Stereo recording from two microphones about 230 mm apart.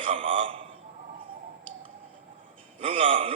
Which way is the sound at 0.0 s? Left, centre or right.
Right.